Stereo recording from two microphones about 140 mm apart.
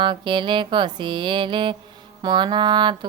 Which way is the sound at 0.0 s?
35° right (ahead or behind).